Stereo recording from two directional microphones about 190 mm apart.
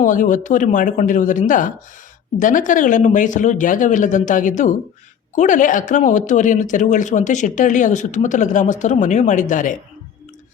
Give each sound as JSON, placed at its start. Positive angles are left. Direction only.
{"t": 0.0, "sound": "speech", "side_deg": 45}